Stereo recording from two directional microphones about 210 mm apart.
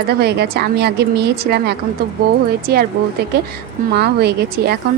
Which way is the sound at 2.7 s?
45° right (ahead or behind).